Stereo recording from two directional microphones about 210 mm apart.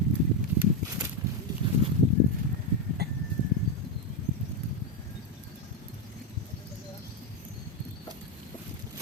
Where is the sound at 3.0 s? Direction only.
50° right (ahead or behind).